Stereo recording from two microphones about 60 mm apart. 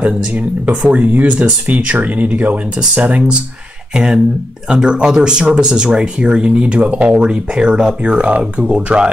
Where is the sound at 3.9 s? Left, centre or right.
Centre.